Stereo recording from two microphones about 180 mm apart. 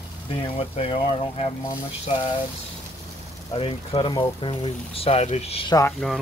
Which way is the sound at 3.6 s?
30° left (ahead or behind).